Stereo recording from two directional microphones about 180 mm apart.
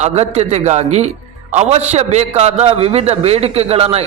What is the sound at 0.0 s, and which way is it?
A man's voice, 35° right (ahead or behind).